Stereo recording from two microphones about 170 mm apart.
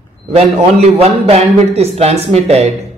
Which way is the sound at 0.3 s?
35° right (ahead or behind).